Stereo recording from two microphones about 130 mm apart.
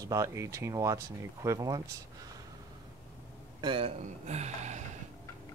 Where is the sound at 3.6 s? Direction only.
40° right (ahead or behind).